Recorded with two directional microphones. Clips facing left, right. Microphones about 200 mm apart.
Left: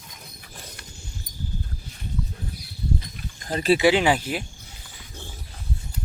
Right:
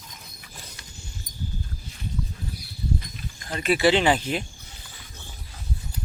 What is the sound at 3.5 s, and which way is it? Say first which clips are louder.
Speech: left 4 dB; 35° left (ahead or behind).